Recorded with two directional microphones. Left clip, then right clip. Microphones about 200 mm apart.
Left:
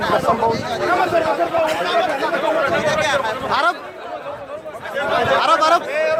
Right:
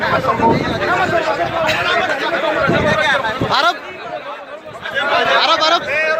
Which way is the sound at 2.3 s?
50° left (ahead or behind).